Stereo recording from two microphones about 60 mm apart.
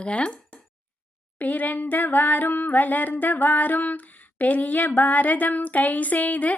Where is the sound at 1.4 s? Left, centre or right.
Left.